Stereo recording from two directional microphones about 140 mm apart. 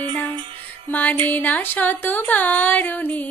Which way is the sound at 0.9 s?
10° left (ahead or behind).